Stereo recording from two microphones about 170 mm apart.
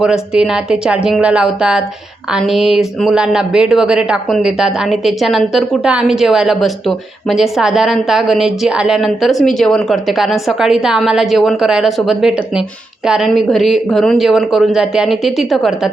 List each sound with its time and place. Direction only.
0.0 s speech: 5° right (ahead or behind)